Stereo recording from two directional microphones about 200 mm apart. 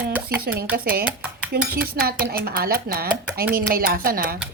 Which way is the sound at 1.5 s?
45° right (ahead or behind).